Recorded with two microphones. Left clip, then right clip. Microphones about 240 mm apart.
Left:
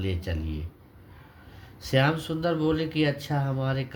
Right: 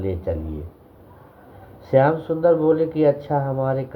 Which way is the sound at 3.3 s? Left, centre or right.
Left.